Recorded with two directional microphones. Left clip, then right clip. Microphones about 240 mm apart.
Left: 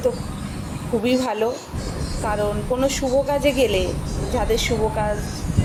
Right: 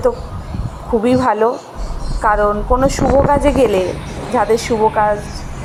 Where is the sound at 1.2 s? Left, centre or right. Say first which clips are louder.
Right 8 dB; centre.